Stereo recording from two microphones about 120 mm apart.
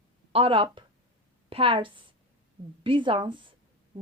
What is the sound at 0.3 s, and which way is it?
A woman's voice, 45° right (ahead or behind).